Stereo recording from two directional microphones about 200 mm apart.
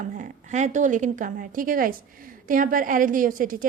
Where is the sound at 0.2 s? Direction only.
35° right (ahead or behind).